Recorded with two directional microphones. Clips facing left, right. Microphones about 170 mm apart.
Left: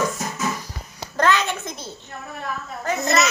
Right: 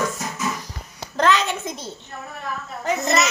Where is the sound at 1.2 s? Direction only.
5° left (ahead or behind).